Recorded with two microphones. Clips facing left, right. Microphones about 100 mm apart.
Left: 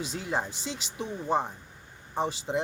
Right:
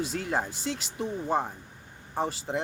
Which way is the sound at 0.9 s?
5° right (ahead or behind).